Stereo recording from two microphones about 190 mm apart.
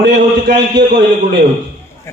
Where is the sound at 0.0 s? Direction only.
60° right (ahead or behind).